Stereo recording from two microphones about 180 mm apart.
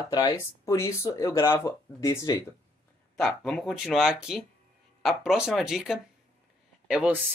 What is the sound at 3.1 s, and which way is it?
Speech, centre (ahead or behind).